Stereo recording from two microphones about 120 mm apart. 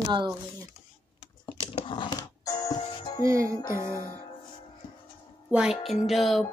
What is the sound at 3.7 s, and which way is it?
Music, 25° left (ahead or behind).